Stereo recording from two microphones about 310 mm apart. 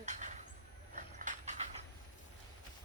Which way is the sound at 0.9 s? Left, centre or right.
Right.